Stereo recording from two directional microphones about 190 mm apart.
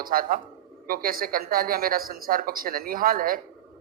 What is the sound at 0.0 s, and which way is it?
A man's voice, 50° right (ahead or behind).